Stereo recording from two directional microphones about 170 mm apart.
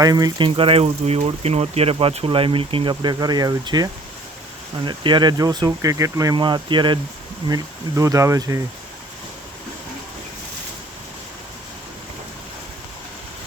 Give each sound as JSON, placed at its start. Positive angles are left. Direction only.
{"t": 0.0, "sound": "speech", "side_deg": -20}
{"t": 4.9, "sound": "speech", "side_deg": -25}